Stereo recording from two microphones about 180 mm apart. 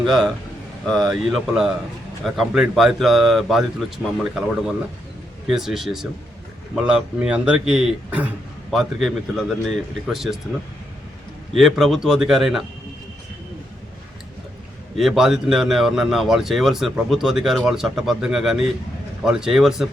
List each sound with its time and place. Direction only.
0.0 s a man's voice: centre (ahead or behind)
11.5 s a man's voice: centre (ahead or behind)
14.9 s a man's voice: centre (ahead or behind)